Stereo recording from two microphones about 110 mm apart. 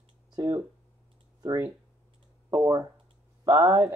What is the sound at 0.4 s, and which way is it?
Speech, 30° right (ahead or behind).